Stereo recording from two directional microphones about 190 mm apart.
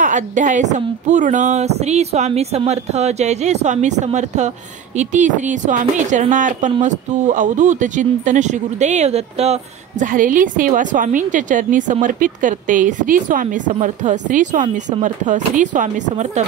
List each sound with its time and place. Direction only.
0.0 s speech: 40° right (ahead or behind)